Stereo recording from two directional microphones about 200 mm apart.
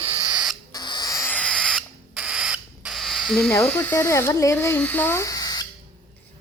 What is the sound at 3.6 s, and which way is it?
Speech, 10° left (ahead or behind).